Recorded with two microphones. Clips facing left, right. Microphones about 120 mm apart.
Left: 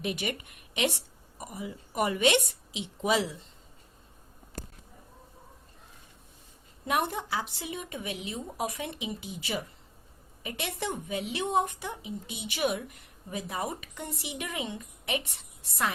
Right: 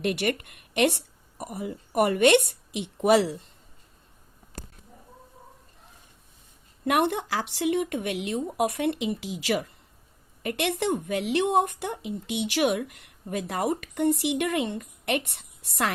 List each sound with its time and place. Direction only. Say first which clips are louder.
0.0 s a woman's voice: right 7 dB; 65° right (ahead or behind)
6.8 s a woman's voice: right 6 dB; 65° right (ahead or behind)